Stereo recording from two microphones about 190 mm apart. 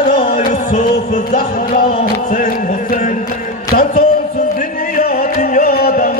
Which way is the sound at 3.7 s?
45° left (ahead or behind).